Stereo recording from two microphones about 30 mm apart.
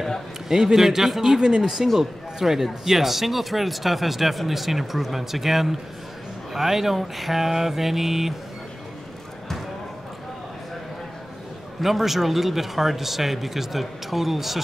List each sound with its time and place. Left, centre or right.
0.5 s speech: centre
1.2 s speech: right
11.8 s speech: centre